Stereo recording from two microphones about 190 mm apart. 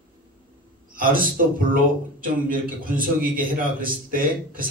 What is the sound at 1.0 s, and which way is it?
A man's voice, 50° right (ahead or behind).